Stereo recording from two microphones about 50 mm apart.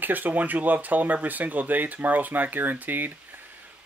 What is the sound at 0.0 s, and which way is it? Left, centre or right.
Speech, right.